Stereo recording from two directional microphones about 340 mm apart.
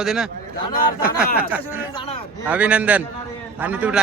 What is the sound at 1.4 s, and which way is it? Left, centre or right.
Speech, centre.